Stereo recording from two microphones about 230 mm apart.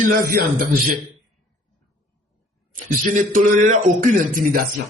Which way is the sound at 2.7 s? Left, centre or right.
Right.